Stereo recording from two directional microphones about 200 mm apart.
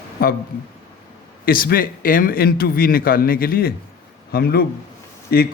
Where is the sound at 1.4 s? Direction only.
45° left (ahead or behind).